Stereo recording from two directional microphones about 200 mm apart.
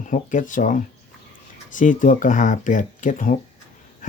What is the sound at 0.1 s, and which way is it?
Speech, 40° left (ahead or behind).